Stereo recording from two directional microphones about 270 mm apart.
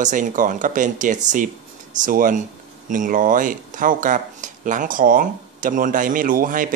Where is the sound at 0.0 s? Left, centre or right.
Right.